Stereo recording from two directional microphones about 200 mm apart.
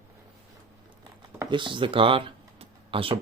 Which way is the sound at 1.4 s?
25° right (ahead or behind).